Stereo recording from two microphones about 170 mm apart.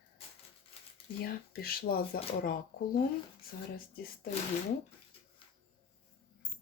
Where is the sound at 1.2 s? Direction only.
65° left (ahead or behind).